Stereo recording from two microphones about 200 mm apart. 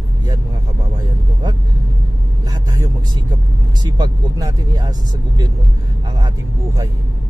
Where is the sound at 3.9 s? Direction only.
20° right (ahead or behind).